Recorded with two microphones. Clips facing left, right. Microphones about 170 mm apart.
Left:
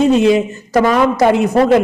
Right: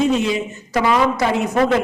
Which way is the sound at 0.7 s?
45° left (ahead or behind).